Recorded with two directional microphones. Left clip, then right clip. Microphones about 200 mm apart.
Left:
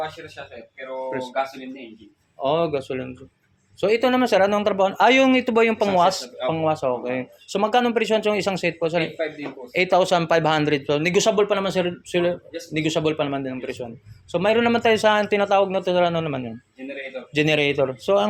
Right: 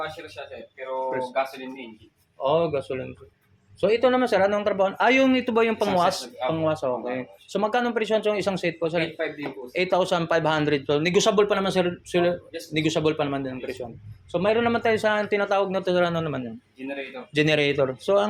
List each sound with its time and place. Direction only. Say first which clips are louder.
2.4 s speech: left 1 dB; 15° left (ahead or behind)